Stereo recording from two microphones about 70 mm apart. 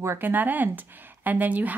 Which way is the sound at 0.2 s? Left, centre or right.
Right.